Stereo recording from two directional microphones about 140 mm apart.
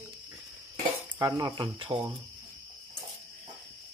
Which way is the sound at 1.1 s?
25° right (ahead or behind).